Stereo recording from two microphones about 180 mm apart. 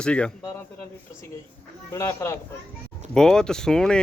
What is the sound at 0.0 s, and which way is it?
Speech, 5° left (ahead or behind).